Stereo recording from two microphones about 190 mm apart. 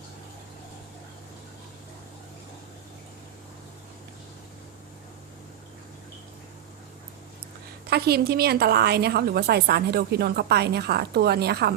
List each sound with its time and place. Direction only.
7.9 s a woman's voice: 55° right (ahead or behind)